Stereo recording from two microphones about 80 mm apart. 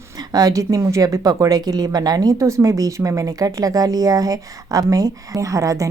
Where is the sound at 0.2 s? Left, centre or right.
Right.